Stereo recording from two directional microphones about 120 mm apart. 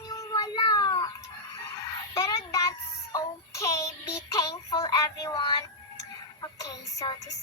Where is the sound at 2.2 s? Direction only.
25° left (ahead or behind).